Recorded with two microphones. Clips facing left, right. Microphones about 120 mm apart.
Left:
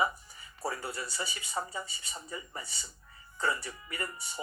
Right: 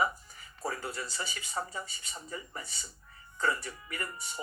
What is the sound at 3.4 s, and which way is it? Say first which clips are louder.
A man's voice: right 1 dB; 25° left (ahead or behind).